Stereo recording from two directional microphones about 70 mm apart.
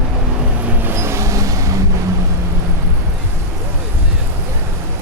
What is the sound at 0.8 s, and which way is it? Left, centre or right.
Vehicle, right.